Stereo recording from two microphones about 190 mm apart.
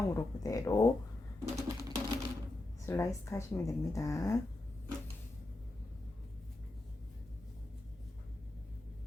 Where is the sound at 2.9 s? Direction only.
15° left (ahead or behind).